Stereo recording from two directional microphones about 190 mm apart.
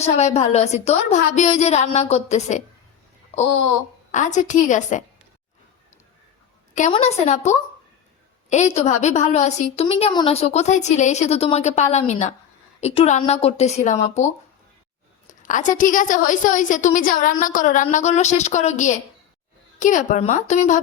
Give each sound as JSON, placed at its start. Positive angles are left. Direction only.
{"t": 0.0, "sound": "a woman's voice", "side_deg": 35}
{"t": 6.9, "sound": "a woman's voice", "side_deg": 35}
{"t": 15.3, "sound": "a sound", "side_deg": 40}
{"t": 15.8, "sound": "a woman's voice", "side_deg": 45}